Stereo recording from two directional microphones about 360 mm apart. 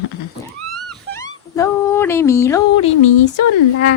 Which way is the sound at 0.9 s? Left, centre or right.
Centre.